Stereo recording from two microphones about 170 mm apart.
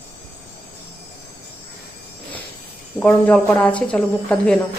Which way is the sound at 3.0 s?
5° left (ahead or behind).